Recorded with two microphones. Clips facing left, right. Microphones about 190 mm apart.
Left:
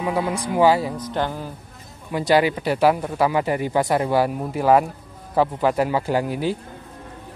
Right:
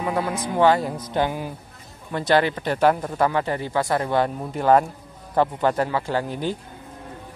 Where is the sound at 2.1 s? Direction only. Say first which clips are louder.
Left 2 dB; 10° left (ahead or behind).